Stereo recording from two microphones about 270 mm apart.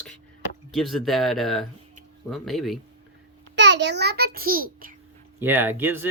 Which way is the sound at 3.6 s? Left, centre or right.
Right.